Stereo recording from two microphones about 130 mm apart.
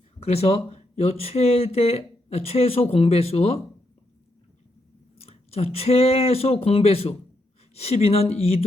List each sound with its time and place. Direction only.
0.2 s speech: 50° left (ahead or behind)
5.2 s speech: 50° left (ahead or behind)